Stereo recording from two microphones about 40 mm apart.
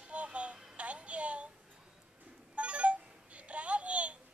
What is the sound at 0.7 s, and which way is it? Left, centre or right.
Music, right.